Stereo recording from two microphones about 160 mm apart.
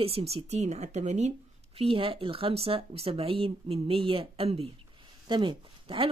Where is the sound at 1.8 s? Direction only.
35° right (ahead or behind).